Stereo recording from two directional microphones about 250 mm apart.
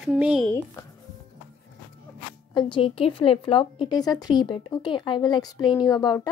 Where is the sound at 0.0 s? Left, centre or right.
Centre.